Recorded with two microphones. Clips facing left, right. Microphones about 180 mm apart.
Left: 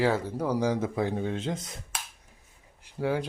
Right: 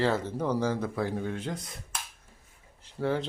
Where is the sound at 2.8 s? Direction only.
10° left (ahead or behind).